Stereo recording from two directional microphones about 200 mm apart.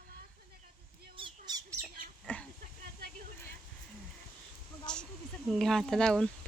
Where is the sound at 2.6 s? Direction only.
50° right (ahead or behind).